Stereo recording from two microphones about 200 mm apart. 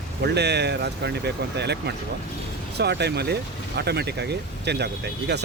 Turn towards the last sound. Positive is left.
turn(degrees=-55)  # may be behind; listen again after turning